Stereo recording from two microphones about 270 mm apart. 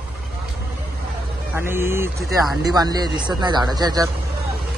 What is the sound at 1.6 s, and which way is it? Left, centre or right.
Speech, centre.